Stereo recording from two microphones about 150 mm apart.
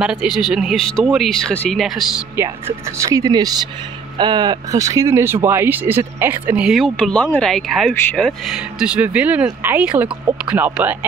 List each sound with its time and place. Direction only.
0.0 s speech: 5° right (ahead or behind)
1.5 s speech: 10° left (ahead or behind)
3.0 s speech: 20° right (ahead or behind)